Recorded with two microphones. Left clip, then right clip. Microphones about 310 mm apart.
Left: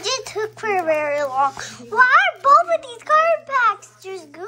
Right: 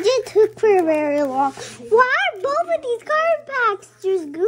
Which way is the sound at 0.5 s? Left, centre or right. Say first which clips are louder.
Right 4 dB; centre.